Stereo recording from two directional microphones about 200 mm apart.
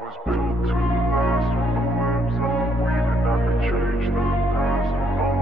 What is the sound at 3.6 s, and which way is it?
Music, centre (ahead or behind).